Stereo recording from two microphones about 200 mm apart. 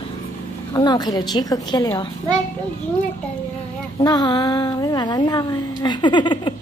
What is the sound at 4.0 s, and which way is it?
A woman's voice, 20° left (ahead or behind).